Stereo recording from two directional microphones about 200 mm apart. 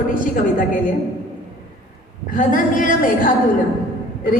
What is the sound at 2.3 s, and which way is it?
A woman's voice, 40° left (ahead or behind).